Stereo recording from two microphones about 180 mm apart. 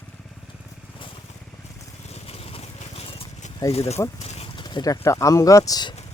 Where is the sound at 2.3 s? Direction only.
35° left (ahead or behind).